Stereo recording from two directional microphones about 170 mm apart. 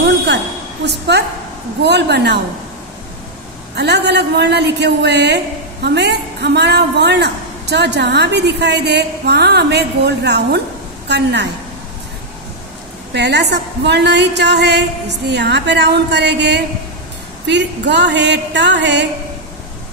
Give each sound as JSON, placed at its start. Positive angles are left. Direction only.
{"t": 0.0, "sound": "a sound", "side_deg": -90}
{"t": 0.8, "sound": "a man's voice", "side_deg": -80}
{"t": 3.7, "sound": "a man's voice", "side_deg": -80}
{"t": 11.1, "sound": "a man's voice", "side_deg": -90}
{"t": 13.1, "sound": "a man's voice", "side_deg": -85}
{"t": 17.5, "sound": "a sound", "side_deg": -90}